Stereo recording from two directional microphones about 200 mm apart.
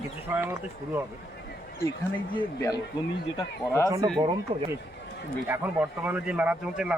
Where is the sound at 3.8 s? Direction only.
15° right (ahead or behind).